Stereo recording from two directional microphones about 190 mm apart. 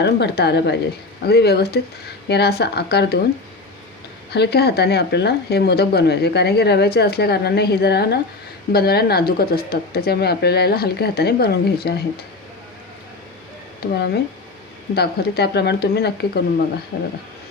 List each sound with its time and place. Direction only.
0.0 s speech: 60° left (ahead or behind)
4.3 s speech: 60° left (ahead or behind)
14.9 s speech: 55° left (ahead or behind)